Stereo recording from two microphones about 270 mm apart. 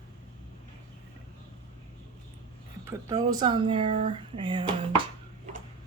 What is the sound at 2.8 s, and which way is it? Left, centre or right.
Speech, centre.